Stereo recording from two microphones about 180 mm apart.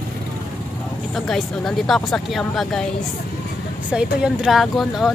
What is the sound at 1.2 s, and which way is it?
Speech, centre (ahead or behind).